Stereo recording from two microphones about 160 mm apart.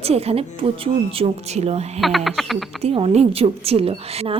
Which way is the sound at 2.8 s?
40° right (ahead or behind).